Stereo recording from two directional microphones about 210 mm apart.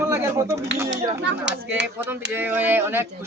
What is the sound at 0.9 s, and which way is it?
Speech, 55° right (ahead or behind).